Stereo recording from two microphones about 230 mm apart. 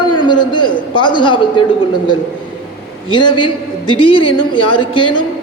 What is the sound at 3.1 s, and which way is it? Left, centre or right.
A man's voice, left.